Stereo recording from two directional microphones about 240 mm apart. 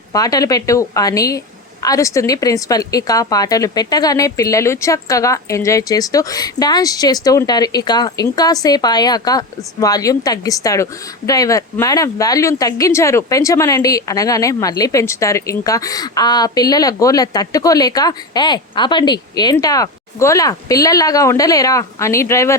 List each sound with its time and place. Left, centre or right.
0.1 s speech: centre